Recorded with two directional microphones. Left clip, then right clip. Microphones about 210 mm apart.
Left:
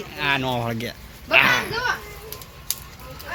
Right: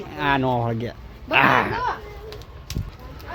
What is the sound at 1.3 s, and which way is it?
Speech, 30° right (ahead or behind).